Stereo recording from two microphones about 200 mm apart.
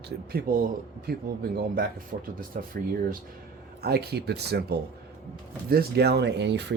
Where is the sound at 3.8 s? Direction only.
50° right (ahead or behind).